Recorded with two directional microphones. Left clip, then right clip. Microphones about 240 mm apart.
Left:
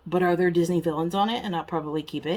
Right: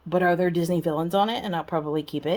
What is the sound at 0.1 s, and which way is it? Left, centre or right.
Speech, right.